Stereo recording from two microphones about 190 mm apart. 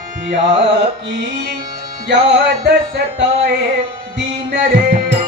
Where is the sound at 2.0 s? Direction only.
70° right (ahead or behind).